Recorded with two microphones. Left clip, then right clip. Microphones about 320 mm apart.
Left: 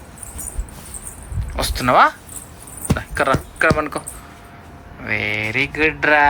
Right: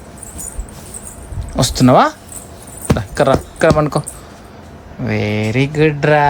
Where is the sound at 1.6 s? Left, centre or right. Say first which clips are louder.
Right 3 dB; centre.